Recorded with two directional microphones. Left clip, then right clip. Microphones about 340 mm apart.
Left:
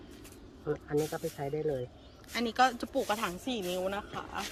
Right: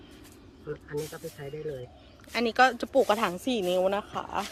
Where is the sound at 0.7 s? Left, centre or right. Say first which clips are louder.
Left 3 dB; left.